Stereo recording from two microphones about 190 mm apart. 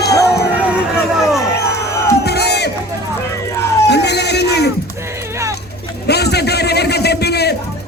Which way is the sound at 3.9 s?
60° left (ahead or behind).